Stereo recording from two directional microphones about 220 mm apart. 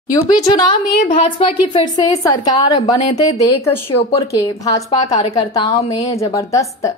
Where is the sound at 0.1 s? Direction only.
15° left (ahead or behind).